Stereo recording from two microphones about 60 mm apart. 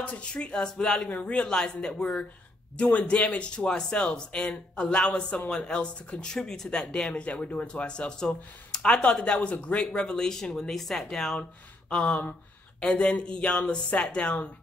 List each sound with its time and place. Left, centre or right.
0.0 s speech: centre
6.3 s speech: centre
11.9 s speech: centre